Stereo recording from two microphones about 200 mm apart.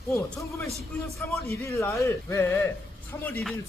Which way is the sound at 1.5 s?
15° left (ahead or behind).